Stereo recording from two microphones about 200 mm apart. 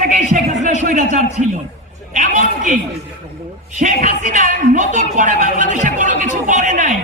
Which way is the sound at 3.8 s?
40° right (ahead or behind).